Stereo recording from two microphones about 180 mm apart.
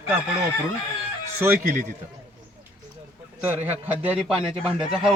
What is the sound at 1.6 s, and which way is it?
Speech, 45° right (ahead or behind).